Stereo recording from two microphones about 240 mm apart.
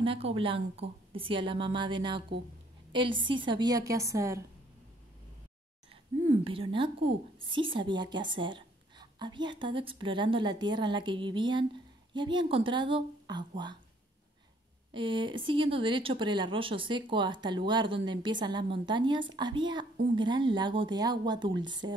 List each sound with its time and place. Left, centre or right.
0.0 s a woman's voice: right
6.4 s a woman's voice: right
14.9 s a woman's voice: right